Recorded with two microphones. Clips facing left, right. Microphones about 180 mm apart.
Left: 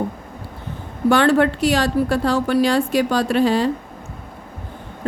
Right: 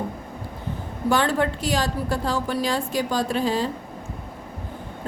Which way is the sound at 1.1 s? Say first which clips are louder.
Left 6 dB; 70° left (ahead or behind).